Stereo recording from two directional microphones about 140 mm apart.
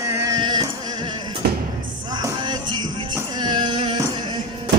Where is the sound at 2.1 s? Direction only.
30° right (ahead or behind).